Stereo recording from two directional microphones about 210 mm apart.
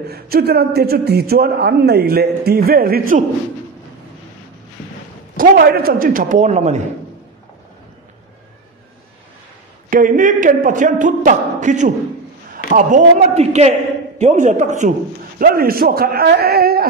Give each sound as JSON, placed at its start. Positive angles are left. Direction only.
{"t": 0.0, "sound": "a man's voice", "side_deg": -50}
{"t": 5.4, "sound": "speech", "side_deg": -45}
{"t": 9.8, "sound": "a man's voice", "side_deg": -40}